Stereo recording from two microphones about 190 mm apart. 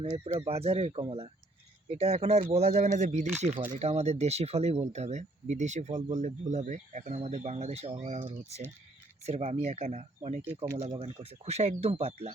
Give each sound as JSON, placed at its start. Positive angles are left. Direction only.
{"t": 0.0, "sound": "speech", "side_deg": -35}